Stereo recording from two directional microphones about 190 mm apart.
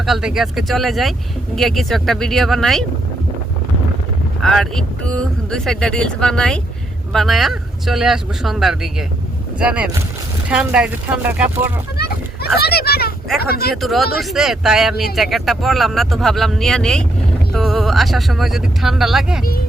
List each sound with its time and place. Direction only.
0.0 s speech: centre (ahead or behind)
4.4 s speech: centre (ahead or behind)
11.9 s a sound: 55° left (ahead or behind)
12.5 s speech: 55° left (ahead or behind)
14.2 s speech: centre (ahead or behind)